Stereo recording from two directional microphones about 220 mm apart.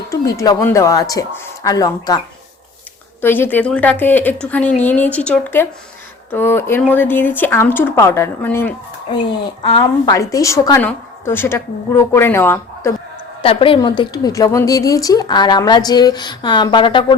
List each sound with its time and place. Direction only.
0.1 s a woman's voice: 15° left (ahead or behind)
9.6 s a woman's voice: 20° left (ahead or behind)
13.4 s a woman's voice: 25° left (ahead or behind)